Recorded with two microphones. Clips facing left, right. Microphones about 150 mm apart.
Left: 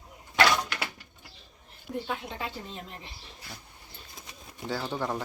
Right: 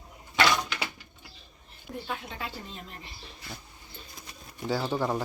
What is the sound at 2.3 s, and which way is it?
Speech, 15° left (ahead or behind).